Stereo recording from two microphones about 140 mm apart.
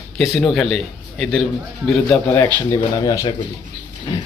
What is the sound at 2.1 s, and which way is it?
Speech, 20° left (ahead or behind).